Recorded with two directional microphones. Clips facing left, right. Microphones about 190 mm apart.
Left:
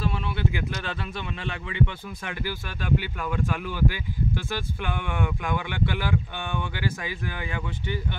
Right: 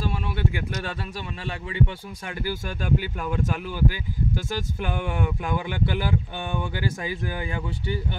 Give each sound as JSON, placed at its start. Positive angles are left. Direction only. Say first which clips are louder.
{"t": 0.0, "sound": "speech", "louder": "right 1 dB", "side_deg": -45}